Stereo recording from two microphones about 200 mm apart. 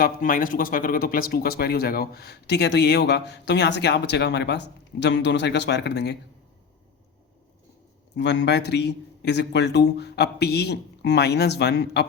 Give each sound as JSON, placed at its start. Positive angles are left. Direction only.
{"t": 0.0, "sound": "speech", "side_deg": 45}
{"t": 8.1, "sound": "speech", "side_deg": 60}